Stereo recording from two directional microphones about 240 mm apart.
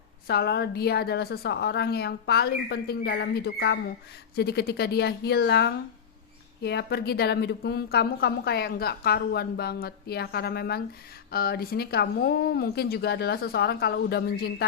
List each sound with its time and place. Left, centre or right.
0.3 s a woman's voice: left